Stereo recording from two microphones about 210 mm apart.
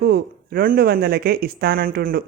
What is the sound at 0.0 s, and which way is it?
Speech, 45° right (ahead or behind).